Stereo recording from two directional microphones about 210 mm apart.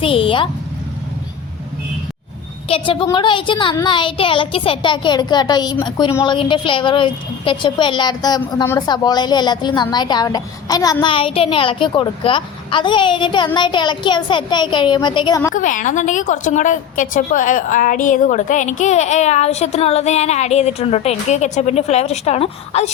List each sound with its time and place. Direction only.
0.0 s speech: 25° left (ahead or behind)
2.6 s a woman's voice: 25° left (ahead or behind)
15.5 s a woman's voice: 40° left (ahead or behind)